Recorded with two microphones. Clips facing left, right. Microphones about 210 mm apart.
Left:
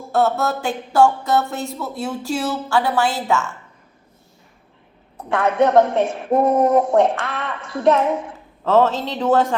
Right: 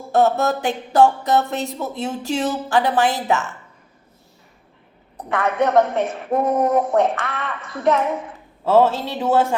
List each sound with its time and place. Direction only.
0.1 s a sound: 15° right (ahead or behind)
5.3 s a woman's voice: 15° left (ahead or behind)
8.6 s speech: 10° right (ahead or behind)